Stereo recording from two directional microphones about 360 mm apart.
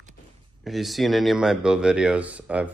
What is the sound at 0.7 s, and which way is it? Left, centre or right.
Speech, centre.